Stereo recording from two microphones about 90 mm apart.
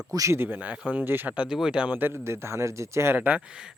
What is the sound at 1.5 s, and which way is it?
Speech, 5° right (ahead or behind).